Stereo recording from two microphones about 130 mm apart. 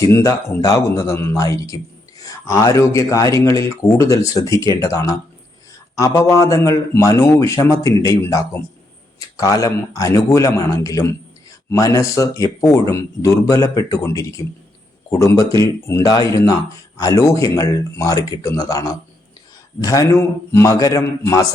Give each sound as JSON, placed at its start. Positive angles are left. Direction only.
{"t": 0.1, "sound": "speech", "side_deg": 20}